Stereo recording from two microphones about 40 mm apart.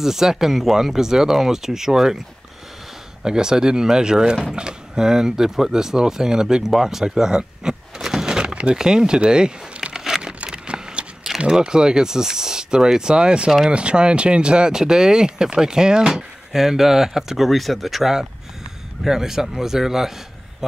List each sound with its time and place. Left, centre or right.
0.0 s speech: centre
3.3 s speech: centre
9.9 s crumpling: centre
10.4 s a sound: right
11.4 s speech: right
16.5 s speech: centre